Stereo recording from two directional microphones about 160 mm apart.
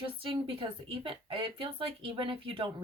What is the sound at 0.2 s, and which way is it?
Speech, 35° right (ahead or behind).